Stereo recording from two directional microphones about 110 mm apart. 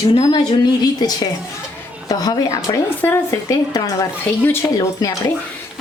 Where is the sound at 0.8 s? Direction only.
35° left (ahead or behind).